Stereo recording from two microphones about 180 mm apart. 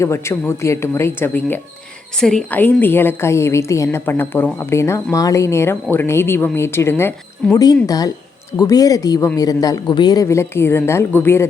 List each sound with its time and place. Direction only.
0.0 s speech: 15° left (ahead or behind)